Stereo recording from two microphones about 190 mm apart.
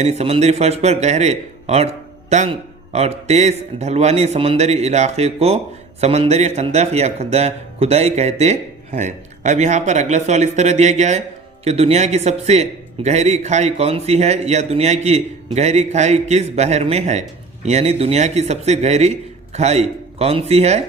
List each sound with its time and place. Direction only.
0.0 s speech: 35° right (ahead or behind)